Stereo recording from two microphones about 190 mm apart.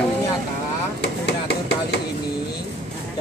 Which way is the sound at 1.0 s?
60° left (ahead or behind).